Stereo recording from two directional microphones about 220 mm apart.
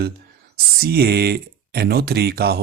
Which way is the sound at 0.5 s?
45° right (ahead or behind).